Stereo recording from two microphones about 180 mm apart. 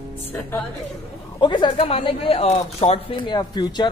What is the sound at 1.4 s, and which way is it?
Speech, 25° left (ahead or behind).